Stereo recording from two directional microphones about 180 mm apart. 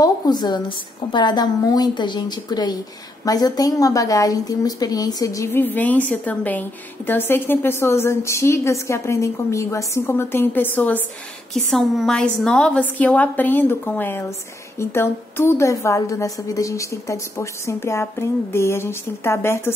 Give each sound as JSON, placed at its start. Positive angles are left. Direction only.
{"t": 0.0, "sound": "a woman's voice", "side_deg": 25}
{"t": 11.5, "sound": "speech", "side_deg": 0}